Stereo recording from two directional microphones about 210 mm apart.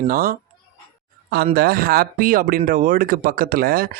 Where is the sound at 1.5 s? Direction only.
45° right (ahead or behind).